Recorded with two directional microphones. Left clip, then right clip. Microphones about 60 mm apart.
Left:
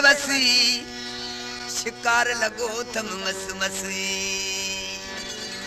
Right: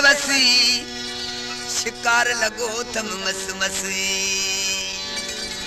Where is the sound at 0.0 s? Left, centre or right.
Right.